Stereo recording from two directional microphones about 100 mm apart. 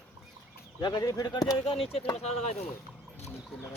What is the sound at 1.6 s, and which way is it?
Speech, 70° left (ahead or behind).